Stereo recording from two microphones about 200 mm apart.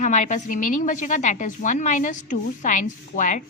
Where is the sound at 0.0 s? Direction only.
40° left (ahead or behind).